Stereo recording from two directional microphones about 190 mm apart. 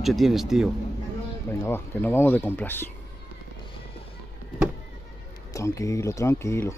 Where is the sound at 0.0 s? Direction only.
Centre (ahead or behind).